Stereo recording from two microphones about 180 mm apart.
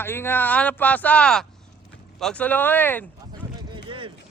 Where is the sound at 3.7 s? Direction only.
30° right (ahead or behind).